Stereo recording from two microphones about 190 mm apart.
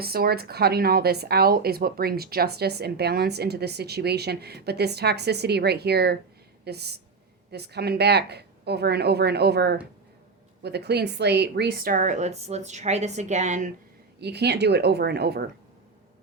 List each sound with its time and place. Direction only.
0.0 s speech: 55° right (ahead or behind)
14.2 s speech: 60° right (ahead or behind)